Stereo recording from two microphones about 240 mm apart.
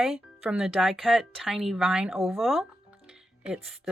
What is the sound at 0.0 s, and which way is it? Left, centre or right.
Speech, centre.